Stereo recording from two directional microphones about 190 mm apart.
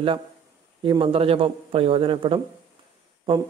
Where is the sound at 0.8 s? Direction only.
25° right (ahead or behind).